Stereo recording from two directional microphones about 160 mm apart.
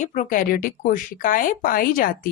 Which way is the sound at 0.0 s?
50° left (ahead or behind).